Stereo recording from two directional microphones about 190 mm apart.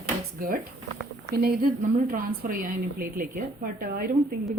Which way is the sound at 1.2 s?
55° right (ahead or behind).